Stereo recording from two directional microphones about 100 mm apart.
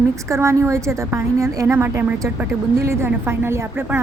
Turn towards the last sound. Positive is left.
turn(degrees=-25)  # may be behind; listen again after turning